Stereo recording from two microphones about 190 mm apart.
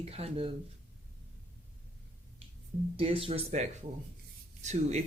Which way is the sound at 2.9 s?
30° right (ahead or behind).